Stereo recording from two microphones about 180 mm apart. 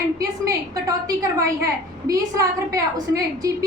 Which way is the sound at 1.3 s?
20° right (ahead or behind).